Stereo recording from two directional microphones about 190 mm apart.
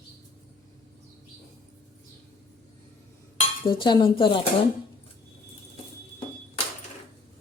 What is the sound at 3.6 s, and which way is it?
Speech, 25° left (ahead or behind).